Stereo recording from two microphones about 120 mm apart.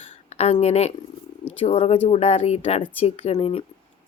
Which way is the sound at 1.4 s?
55° left (ahead or behind).